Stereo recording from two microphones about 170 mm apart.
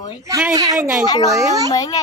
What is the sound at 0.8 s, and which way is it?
Speech, 5° right (ahead or behind).